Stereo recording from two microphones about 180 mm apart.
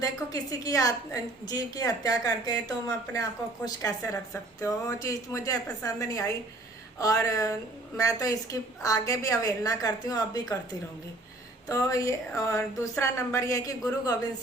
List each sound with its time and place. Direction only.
0.0 s a woman's voice: 20° left (ahead or behind)
11.7 s a woman's voice: 15° left (ahead or behind)